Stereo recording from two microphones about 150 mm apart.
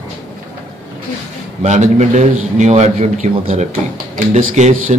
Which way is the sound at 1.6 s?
50° right (ahead or behind).